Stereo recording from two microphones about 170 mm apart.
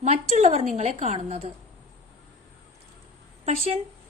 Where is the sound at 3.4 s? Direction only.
40° right (ahead or behind).